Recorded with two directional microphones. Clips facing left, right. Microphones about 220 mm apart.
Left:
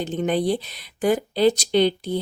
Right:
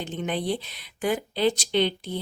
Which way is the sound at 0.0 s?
40° left (ahead or behind).